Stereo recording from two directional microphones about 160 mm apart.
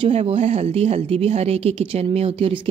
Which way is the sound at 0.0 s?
40° right (ahead or behind).